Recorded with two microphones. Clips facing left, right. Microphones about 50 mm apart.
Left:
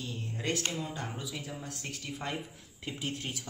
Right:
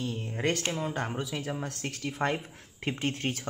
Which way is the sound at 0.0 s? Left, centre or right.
Right.